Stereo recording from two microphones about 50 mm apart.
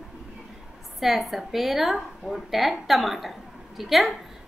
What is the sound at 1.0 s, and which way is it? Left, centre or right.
Speech, centre.